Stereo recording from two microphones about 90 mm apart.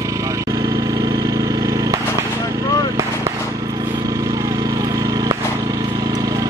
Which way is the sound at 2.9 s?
40° right (ahead or behind).